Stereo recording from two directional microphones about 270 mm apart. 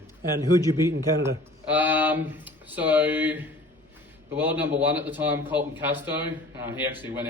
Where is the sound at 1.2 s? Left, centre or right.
Centre.